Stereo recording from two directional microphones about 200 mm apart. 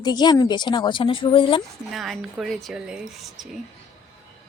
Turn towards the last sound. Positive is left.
turn(degrees=0)  # may be behind; listen again after turning